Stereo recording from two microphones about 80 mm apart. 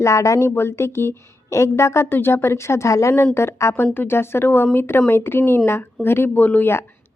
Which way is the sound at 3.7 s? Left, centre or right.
Left.